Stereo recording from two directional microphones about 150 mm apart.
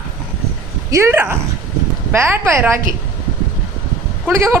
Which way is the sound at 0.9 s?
20° right (ahead or behind).